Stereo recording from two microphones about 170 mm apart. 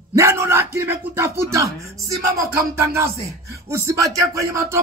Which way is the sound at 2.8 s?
15° right (ahead or behind).